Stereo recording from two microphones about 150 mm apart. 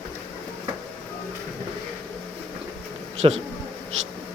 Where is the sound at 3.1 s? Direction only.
45° right (ahead or behind).